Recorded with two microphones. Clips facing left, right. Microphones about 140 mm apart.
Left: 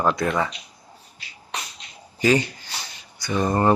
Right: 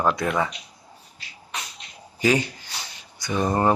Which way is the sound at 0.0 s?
5° right (ahead or behind).